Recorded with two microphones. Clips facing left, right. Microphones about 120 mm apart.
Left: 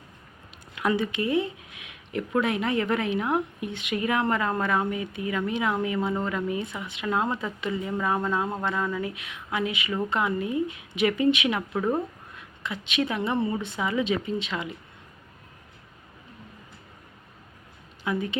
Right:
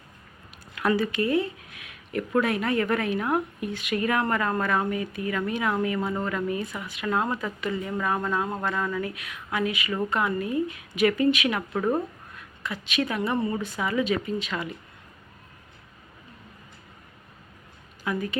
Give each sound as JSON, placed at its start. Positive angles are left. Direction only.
{"t": 0.8, "sound": "a woman's voice", "side_deg": 15}
{"t": 11.7, "sound": "speech", "side_deg": 0}
{"t": 12.4, "sound": "a woman's voice", "side_deg": 20}
{"t": 18.0, "sound": "speech", "side_deg": 20}